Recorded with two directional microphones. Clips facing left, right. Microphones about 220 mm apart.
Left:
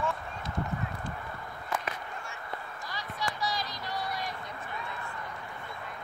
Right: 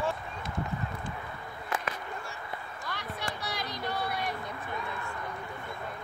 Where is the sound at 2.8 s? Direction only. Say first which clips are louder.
Left 1 dB; 60° right (ahead or behind).